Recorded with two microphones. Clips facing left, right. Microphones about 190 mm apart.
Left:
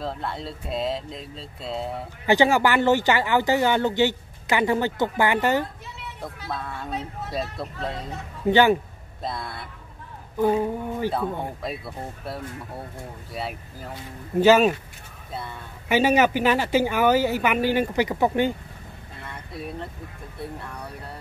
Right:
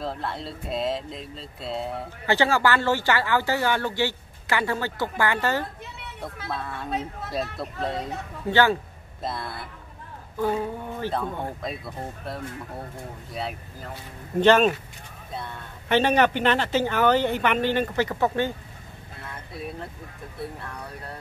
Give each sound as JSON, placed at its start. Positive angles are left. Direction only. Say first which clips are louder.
{"t": 0.0, "sound": "speech", "louder": "even", "side_deg": 0}
{"t": 2.2, "sound": "speech", "louder": "left 3 dB", "side_deg": 15}
{"t": 6.5, "sound": "speech", "louder": "right 1 dB", "side_deg": 0}
{"t": 8.5, "sound": "speech", "louder": "left 3 dB", "side_deg": 15}
{"t": 9.2, "sound": "speech", "louder": "even", "side_deg": 0}
{"t": 10.4, "sound": "speech", "louder": "left 4 dB", "side_deg": 15}
{"t": 19.2, "sound": "vehicle", "louder": "left 1 dB", "side_deg": 0}